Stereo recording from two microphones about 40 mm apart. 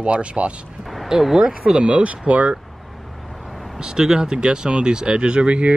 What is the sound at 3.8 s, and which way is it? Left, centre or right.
Speech, centre.